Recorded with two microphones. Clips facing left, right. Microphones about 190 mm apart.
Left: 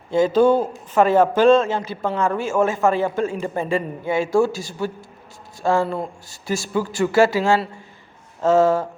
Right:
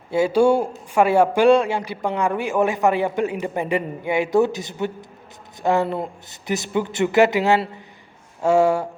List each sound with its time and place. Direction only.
0.1 s a man's voice: 10° right (ahead or behind)